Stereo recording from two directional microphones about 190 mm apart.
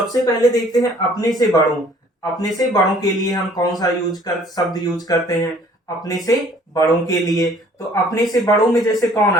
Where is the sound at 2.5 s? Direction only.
20° left (ahead or behind).